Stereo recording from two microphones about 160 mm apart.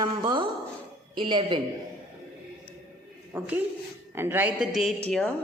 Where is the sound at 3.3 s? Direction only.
10° right (ahead or behind).